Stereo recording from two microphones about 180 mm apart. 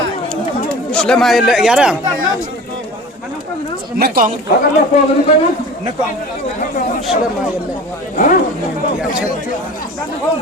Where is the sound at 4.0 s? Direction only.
50° right (ahead or behind).